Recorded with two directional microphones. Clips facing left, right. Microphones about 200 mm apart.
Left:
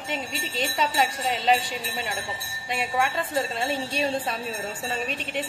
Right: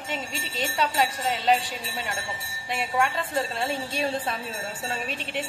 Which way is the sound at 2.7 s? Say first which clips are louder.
Even; centre (ahead or behind).